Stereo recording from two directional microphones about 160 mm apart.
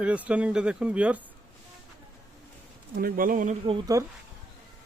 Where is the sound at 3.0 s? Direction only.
65° right (ahead or behind).